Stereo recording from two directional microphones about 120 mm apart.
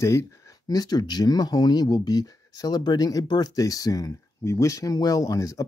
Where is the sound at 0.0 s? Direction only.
25° left (ahead or behind).